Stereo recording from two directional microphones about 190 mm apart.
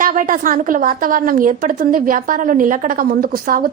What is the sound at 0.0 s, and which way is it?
Speech, 45° right (ahead or behind).